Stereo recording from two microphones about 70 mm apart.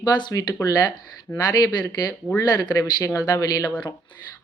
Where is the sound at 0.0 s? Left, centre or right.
Left.